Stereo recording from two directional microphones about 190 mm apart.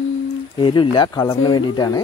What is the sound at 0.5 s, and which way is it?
Speech, 25° left (ahead or behind).